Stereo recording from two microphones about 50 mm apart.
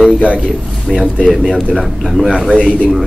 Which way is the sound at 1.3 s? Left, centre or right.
Centre.